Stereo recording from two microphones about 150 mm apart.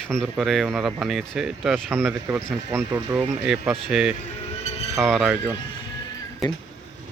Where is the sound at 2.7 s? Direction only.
20° right (ahead or behind).